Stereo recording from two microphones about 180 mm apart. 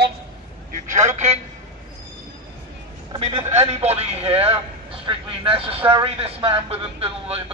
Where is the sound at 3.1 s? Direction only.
25° right (ahead or behind).